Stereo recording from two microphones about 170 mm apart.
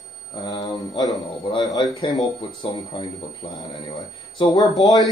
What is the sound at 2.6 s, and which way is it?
Speech, 30° left (ahead or behind).